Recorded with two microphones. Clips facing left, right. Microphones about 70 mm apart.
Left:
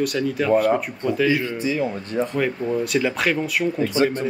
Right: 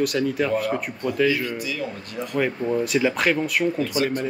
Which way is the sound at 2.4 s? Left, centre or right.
Centre.